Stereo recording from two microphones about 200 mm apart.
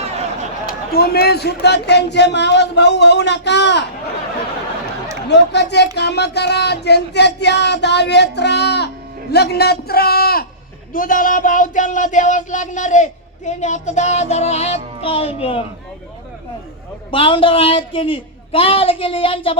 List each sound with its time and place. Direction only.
0.7 s a man's voice: 50° left (ahead or behind)
5.3 s a man's voice: 60° left (ahead or behind)
10.9 s a sound: 45° left (ahead or behind); by 15.6 s 30° left (ahead or behind)
17.1 s a woman's voice: 25° left (ahead or behind)